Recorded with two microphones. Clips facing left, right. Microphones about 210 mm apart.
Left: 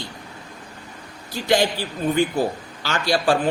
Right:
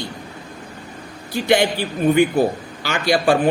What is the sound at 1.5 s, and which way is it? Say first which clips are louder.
Speech: right 2 dB; 20° right (ahead or behind).